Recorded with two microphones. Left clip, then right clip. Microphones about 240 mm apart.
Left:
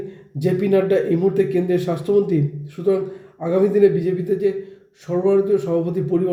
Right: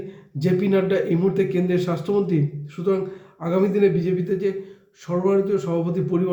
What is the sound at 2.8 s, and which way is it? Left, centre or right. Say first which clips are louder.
Speech: left 3 dB; centre.